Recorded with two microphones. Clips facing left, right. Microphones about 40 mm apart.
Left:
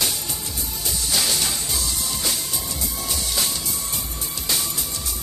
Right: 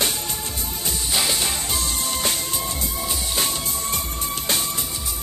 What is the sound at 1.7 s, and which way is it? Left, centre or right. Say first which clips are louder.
Music: right 2 dB; right.